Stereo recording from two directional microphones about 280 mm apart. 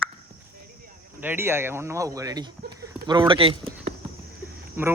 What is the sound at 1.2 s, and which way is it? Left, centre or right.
Speech, centre.